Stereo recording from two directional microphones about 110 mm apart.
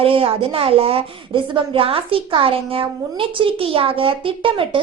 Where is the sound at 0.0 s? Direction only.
55° right (ahead or behind).